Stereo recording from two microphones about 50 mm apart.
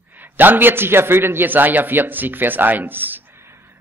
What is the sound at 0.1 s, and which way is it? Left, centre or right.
A man's voice, right.